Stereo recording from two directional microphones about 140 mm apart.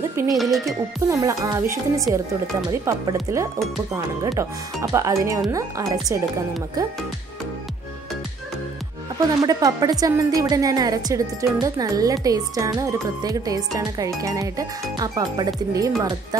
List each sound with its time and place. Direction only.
0.1 s speech: 20° right (ahead or behind)
0.4 s speech: centre (ahead or behind)
1.0 s speech: 20° right (ahead or behind)
9.4 s speech: 25° right (ahead or behind)